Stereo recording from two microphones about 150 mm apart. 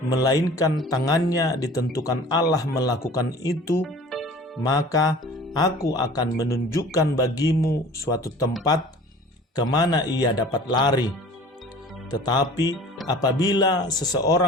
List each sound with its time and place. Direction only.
0.1 s speech: 25° left (ahead or behind)
3.8 s music: centre (ahead or behind)
4.6 s speech: 25° left (ahead or behind)
9.6 s speech: 25° left (ahead or behind)
12.1 s speech: 25° left (ahead or behind)